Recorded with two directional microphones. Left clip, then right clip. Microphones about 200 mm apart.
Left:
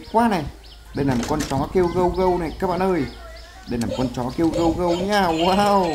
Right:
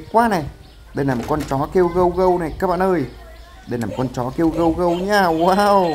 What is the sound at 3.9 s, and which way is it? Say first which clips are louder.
Speech: right 3 dB; 15° right (ahead or behind).